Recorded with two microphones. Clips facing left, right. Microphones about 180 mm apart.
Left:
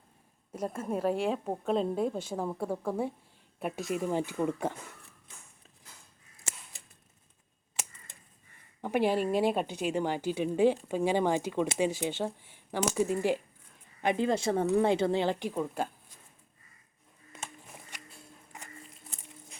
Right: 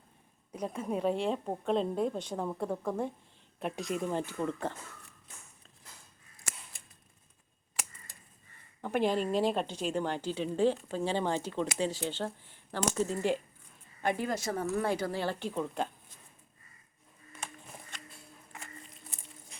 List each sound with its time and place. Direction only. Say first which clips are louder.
0.5 s a woman's voice: left 1 dB; 5° left (ahead or behind)
8.8 s a woman's voice: left 2 dB; 10° left (ahead or behind)